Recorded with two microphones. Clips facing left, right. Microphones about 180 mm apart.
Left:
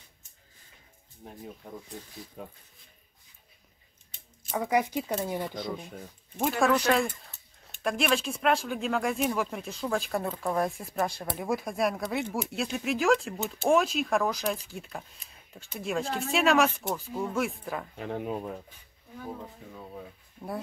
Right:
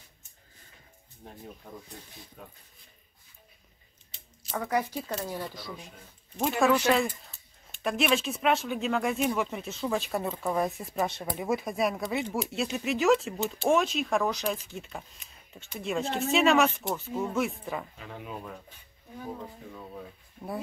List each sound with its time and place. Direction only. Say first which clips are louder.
1.2 s speech: left 2 dB; 10° left (ahead or behind)
4.5 s speech: left 3 dB; 15° left (ahead or behind)
6.4 s speech: right 1 dB; centre (ahead or behind)
17.9 s speech: left 9 dB; 50° left (ahead or behind)
18.3 s speech: left 6 dB; 30° left (ahead or behind)
19.7 s speech: even; 10° left (ahead or behind)